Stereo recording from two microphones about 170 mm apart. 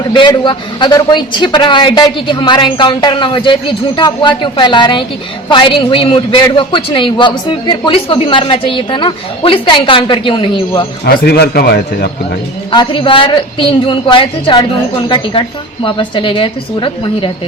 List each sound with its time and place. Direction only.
0.1 s a man's voice: 30° left (ahead or behind)
11.0 s a man's voice: 75° left (ahead or behind)
12.7 s a man's voice: 25° left (ahead or behind)